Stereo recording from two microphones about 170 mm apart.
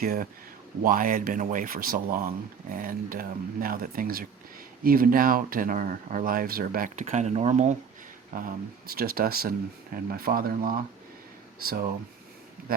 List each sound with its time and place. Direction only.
0.0 s speech: 60° right (ahead or behind)
7.0 s speech: 40° right (ahead or behind); by 10.8 s 55° right (ahead or behind)